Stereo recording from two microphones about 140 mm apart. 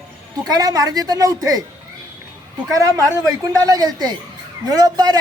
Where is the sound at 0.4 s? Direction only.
25° right (ahead or behind).